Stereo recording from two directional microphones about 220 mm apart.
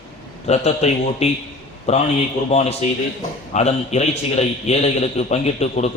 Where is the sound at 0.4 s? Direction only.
30° left (ahead or behind).